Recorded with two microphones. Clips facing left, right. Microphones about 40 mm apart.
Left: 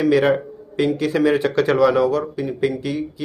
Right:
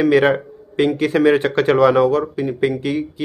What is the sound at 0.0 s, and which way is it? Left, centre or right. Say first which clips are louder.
A man's voice: right 2 dB; right.